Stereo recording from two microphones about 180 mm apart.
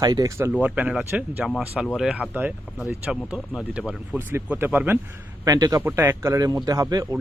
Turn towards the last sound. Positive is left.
turn(degrees=-20)  # may be behind; listen again after turning